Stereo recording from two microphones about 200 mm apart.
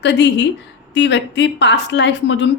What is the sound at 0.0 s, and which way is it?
Speech, 60° left (ahead or behind).